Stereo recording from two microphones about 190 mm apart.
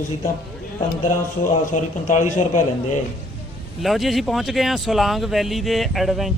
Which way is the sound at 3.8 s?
Centre (ahead or behind).